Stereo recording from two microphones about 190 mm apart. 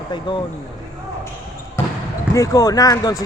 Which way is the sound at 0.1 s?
25° left (ahead or behind).